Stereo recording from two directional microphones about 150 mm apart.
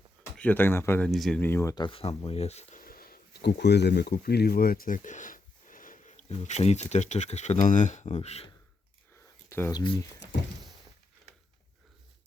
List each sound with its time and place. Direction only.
0.3 s speech: 10° left (ahead or behind)
1.1 s speech: centre (ahead or behind)
1.4 s speech: 15° left (ahead or behind)
1.7 s speech: 35° left (ahead or behind)
2.8 s speech: 80° left; by 8.4 s 45° left (ahead or behind)
9.5 s speech: 15° left (ahead or behind)
9.7 s speech: 30° left (ahead or behind)